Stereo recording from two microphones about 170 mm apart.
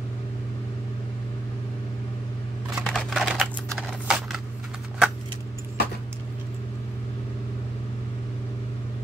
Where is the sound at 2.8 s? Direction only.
Centre (ahead or behind).